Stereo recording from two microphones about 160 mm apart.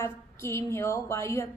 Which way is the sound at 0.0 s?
15° left (ahead or behind).